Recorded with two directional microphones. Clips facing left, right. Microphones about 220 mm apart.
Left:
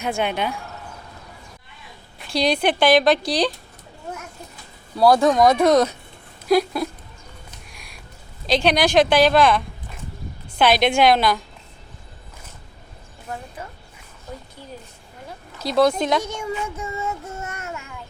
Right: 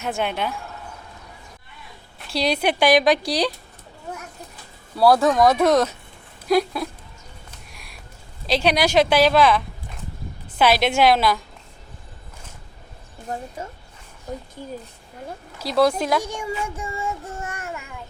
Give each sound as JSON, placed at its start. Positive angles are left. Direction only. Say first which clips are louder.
{"t": 0.0, "sound": "speech", "louder": "left 2 dB", "side_deg": 0}
{"t": 2.1, "sound": "speech", "louder": "left 2 dB", "side_deg": -5}
{"t": 4.9, "sound": "speech", "louder": "left 1 dB", "side_deg": -5}
{"t": 7.7, "sound": "a sound", "louder": "even", "side_deg": 0}
{"t": 8.4, "sound": "speech", "louder": "left 1 dB", "side_deg": -5}
{"t": 13.2, "sound": "a woman's voice", "louder": "right 3 dB", "side_deg": -40}
{"t": 15.6, "sound": "speech", "louder": "left 1 dB", "side_deg": -5}